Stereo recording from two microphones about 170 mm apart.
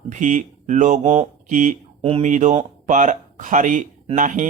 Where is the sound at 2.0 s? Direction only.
40° right (ahead or behind).